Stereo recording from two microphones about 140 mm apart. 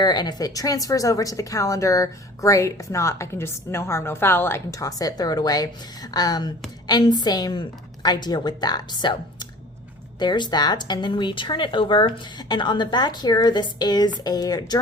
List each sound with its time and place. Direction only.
0.0 s speech: 30° left (ahead or behind)